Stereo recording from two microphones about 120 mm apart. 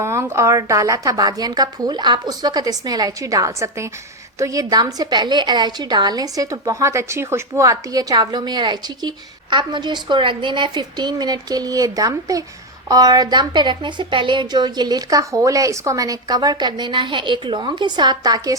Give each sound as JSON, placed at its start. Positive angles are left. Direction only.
{"t": 0.0, "sound": "a woman's voice", "side_deg": -25}